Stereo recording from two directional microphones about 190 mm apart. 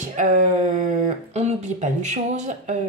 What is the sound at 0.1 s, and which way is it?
Speech, 40° right (ahead or behind).